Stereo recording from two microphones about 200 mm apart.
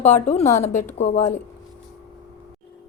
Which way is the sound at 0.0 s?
35° left (ahead or behind).